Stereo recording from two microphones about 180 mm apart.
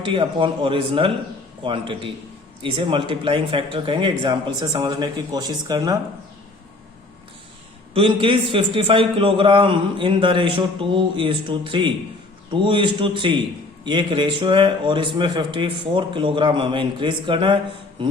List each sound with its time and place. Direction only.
0.1 s a man's voice: 30° right (ahead or behind)
7.9 s a man's voice: 30° right (ahead or behind)